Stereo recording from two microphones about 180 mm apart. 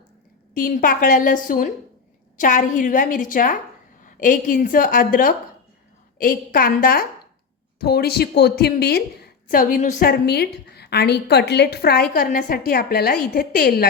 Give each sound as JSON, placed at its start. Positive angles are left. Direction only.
{"t": 0.5, "sound": "a woman's voice", "side_deg": 50}
{"t": 10.1, "sound": "a woman's voice", "side_deg": 60}